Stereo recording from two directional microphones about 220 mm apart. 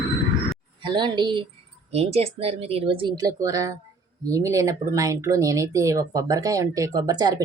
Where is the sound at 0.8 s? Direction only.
20° right (ahead or behind).